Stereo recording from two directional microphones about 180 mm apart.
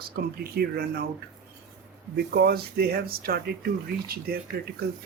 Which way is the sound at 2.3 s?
60° right (ahead or behind).